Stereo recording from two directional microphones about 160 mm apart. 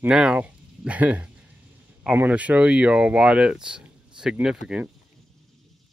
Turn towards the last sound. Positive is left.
turn(degrees=-5)  # may be behind; listen again after turning